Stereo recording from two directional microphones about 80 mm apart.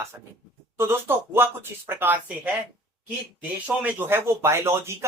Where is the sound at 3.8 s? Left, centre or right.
Right.